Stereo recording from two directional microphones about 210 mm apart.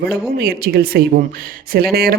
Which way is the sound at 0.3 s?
45° right (ahead or behind).